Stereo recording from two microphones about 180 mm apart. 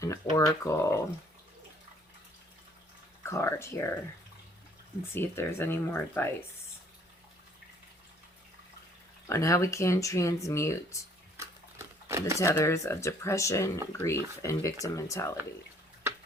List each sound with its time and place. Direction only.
0.3 s speech: 15° left (ahead or behind)
3.2 s speech: 15° left (ahead or behind)
5.1 s speech: 10° left (ahead or behind)
9.2 s speech: 15° left (ahead or behind)
11.3 s a sound: 15° right (ahead or behind)
12.4 s speech: 15° left (ahead or behind)